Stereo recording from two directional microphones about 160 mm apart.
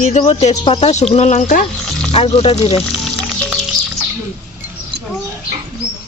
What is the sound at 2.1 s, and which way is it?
Speech, 40° left (ahead or behind).